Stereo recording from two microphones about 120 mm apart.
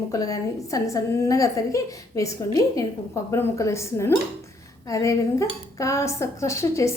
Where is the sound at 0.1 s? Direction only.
30° left (ahead or behind).